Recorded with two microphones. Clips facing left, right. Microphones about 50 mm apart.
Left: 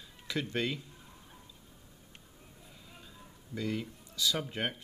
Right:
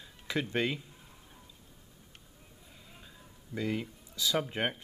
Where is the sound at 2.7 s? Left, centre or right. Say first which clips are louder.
Right 1 dB; centre.